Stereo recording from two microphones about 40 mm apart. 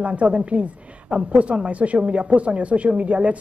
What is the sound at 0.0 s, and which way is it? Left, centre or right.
A woman's voice, right.